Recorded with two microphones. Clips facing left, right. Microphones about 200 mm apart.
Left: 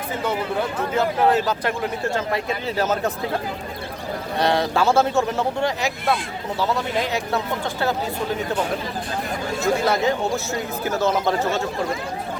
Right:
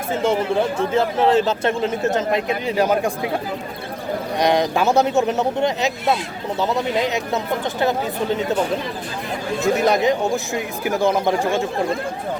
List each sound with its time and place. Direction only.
0.1 s a man's voice: 25° right (ahead or behind)
4.4 s a man's voice: 15° right (ahead or behind)
9.7 s speech: 20° right (ahead or behind)